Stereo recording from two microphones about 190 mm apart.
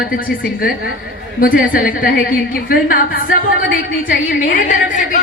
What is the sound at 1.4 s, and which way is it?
A woman's voice, 50° left (ahead or behind).